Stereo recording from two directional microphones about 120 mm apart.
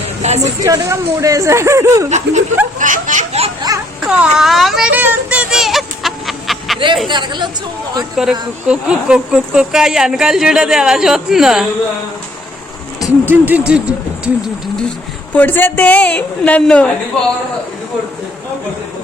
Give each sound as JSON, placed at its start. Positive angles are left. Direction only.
{"t": 0.2, "sound": "music", "side_deg": -70}
{"t": 0.6, "sound": "speech", "side_deg": -30}
{"t": 2.0, "sound": "speech", "side_deg": -75}
{"t": 2.7, "sound": "a sound", "side_deg": -90}
{"t": 4.0, "sound": "a sound", "side_deg": -5}
{"t": 7.1, "sound": "a woman's voice", "side_deg": -40}
{"t": 8.1, "sound": "speech", "side_deg": -5}
{"t": 13.2, "sound": "speech", "side_deg": -15}
{"t": 15.3, "sound": "a man's voice", "side_deg": 15}